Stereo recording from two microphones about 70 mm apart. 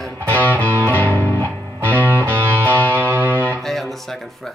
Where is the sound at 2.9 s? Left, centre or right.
Right.